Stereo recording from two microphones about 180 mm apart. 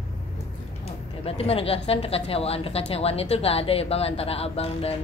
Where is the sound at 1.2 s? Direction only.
30° left (ahead or behind).